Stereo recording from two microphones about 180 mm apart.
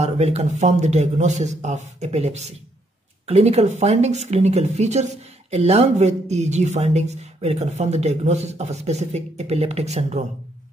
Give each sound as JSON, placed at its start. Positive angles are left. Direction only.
{"t": 0.0, "sound": "speech", "side_deg": -35}